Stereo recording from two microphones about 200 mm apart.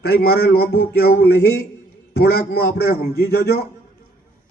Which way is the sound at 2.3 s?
50° left (ahead or behind).